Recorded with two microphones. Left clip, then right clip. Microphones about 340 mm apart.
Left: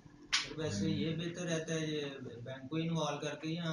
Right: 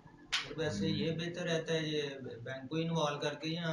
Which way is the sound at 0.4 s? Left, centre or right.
Centre.